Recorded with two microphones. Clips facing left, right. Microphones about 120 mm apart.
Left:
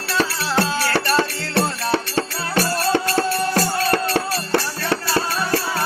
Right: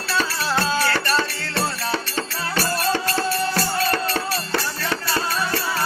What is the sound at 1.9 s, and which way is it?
Music, 55° left (ahead or behind).